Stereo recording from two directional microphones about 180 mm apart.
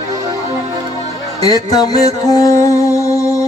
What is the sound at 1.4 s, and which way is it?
Music, 20° left (ahead or behind).